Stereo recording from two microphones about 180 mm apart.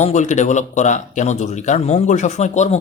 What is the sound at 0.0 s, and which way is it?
Speech, 40° left (ahead or behind).